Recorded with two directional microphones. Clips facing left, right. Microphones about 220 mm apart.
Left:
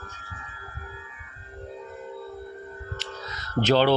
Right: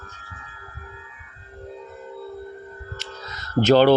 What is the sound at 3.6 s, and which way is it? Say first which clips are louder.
Speech: right 5 dB; 45° right (ahead or behind).